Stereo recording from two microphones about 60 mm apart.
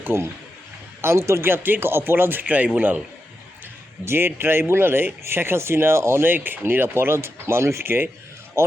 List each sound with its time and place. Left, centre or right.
0.0 s a man's voice: right
4.0 s speech: right
6.2 s speech: right